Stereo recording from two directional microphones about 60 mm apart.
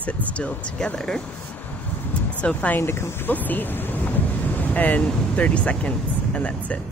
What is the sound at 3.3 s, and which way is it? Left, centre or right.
Speech, left.